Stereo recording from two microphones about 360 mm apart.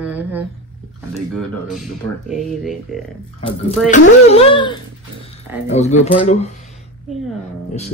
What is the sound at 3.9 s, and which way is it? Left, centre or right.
Speech, centre.